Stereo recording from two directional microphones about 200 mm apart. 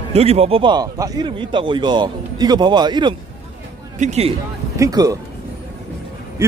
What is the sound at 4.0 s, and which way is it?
Speech, 35° right (ahead or behind).